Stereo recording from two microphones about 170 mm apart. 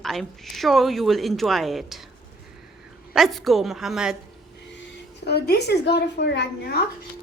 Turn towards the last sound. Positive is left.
turn(degrees=80)